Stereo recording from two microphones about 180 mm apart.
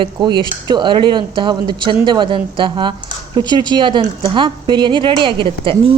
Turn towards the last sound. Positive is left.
turn(degrees=-30)  # may be behind; listen again after turning